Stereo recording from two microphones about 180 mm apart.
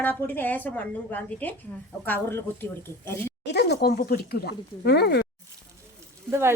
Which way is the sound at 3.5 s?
65° left (ahead or behind).